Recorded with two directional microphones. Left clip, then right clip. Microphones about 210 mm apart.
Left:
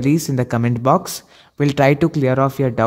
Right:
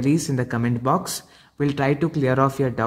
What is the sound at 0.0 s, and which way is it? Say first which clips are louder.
Speech: left 4 dB; 30° left (ahead or behind).